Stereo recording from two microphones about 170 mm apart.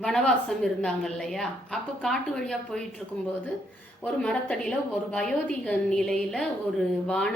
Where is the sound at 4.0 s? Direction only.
5° left (ahead or behind).